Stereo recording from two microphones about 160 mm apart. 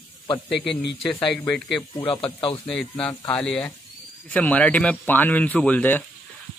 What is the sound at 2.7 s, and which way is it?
A man's voice, 5° left (ahead or behind).